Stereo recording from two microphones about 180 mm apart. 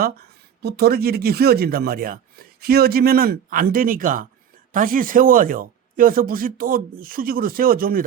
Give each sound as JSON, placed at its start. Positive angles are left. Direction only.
{"t": 0.0, "sound": "speech", "side_deg": -60}